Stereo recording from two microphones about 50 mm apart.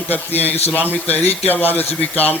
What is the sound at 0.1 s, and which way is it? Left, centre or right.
Speech, left.